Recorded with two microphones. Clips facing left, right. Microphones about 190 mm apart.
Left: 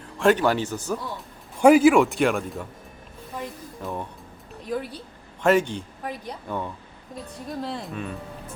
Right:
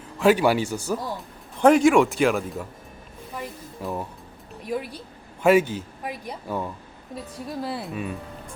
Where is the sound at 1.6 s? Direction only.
5° left (ahead or behind).